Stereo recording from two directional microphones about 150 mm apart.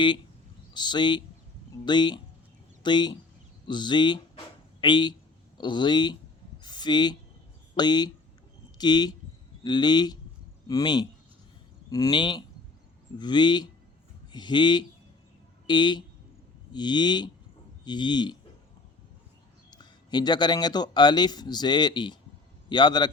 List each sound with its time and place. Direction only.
0.7 s speech: 30° left (ahead or behind)
6.6 s a sound: 30° left (ahead or behind)
7.8 s speech: 30° left (ahead or behind)
19.7 s speech: 30° left (ahead or behind)